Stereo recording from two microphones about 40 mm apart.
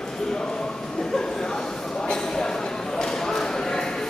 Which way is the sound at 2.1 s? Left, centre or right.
Centre.